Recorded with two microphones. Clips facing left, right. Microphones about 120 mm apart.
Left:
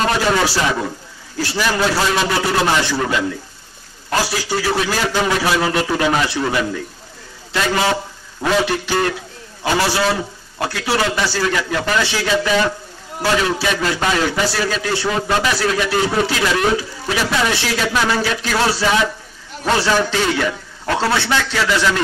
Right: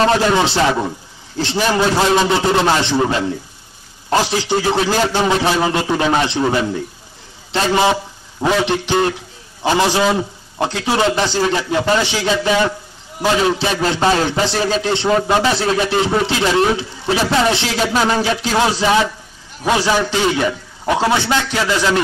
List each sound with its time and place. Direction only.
0.0 s a man's voice: 25° right (ahead or behind)
2.0 s a man's voice: 20° right (ahead or behind)